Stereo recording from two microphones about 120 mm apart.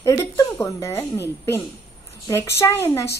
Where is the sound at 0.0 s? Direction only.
20° left (ahead or behind).